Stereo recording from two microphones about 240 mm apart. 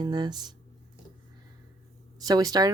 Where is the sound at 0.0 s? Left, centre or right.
Centre.